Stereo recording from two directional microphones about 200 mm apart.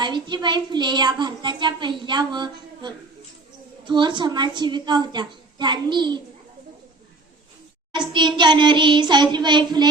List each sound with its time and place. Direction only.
0.0 s a woman's voice: 25° right (ahead or behind)
7.9 s a woman's voice: 25° right (ahead or behind)